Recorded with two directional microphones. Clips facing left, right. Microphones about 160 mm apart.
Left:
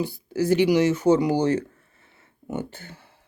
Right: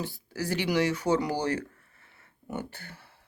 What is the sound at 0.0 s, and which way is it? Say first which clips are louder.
Speech: left 9 dB; 15° left (ahead or behind).